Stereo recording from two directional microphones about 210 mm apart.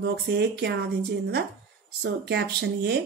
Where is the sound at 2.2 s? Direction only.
50° right (ahead or behind).